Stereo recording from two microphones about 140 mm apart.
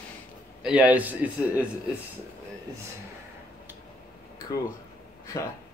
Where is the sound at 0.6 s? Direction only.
5° right (ahead or behind).